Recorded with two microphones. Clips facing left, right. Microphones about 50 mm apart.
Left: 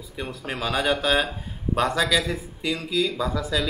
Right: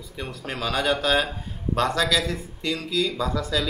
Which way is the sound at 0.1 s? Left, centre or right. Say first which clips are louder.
Left 1 dB; centre.